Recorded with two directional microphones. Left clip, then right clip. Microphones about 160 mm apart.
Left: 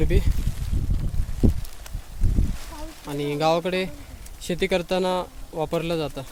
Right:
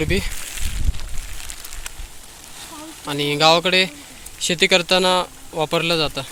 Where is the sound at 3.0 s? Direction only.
10° left (ahead or behind).